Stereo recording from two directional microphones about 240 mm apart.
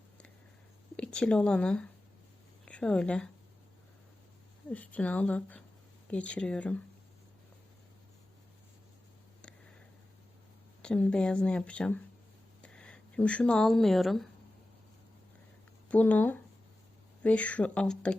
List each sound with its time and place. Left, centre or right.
0.9 s speech: centre
4.7 s speech: centre
10.8 s speech: centre
15.9 s speech: centre